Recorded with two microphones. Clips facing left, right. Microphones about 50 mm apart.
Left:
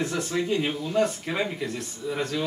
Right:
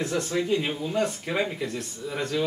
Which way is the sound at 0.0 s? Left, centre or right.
Centre.